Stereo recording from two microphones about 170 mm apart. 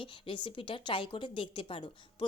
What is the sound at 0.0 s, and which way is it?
Speech, 30° left (ahead or behind).